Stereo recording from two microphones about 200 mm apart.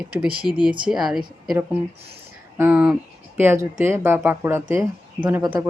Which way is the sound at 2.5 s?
10° right (ahead or behind).